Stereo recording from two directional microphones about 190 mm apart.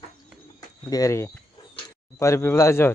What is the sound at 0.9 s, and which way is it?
Speech, 15° left (ahead or behind).